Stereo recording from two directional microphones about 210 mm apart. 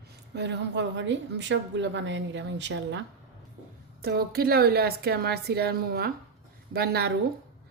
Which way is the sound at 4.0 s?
45° right (ahead or behind).